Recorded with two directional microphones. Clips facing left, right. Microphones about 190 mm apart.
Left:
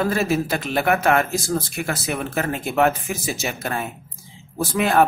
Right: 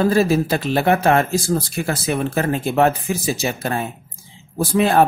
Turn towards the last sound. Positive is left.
turn(degrees=-30)  # may be behind; listen again after turning